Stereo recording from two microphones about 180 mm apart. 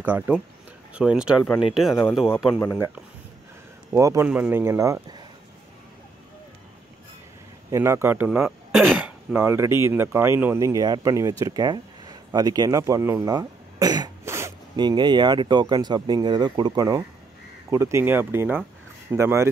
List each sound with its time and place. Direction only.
0.0 s speech: 10° right (ahead or behind)
2.6 s speech: 15° left (ahead or behind)
3.9 s speech: 15° right (ahead or behind)
7.7 s speech: 15° right (ahead or behind)